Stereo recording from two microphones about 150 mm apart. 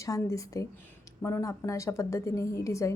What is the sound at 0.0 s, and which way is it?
Speech, 20° left (ahead or behind).